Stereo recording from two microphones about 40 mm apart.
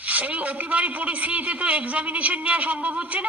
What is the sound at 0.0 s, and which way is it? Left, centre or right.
A man's voice, right.